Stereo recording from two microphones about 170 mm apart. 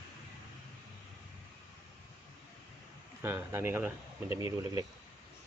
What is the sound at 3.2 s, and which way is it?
Speech, 15° right (ahead or behind).